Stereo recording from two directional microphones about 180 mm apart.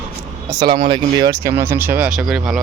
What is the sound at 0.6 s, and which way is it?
Speech, 25° right (ahead or behind).